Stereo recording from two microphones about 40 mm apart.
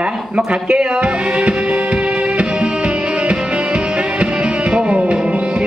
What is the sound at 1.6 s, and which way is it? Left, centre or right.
Music, right.